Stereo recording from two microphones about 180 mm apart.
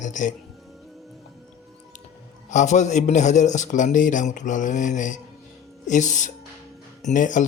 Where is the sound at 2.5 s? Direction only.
40° left (ahead or behind).